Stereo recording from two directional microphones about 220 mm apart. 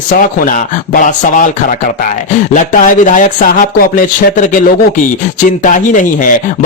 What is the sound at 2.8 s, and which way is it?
Speech, 35° left (ahead or behind).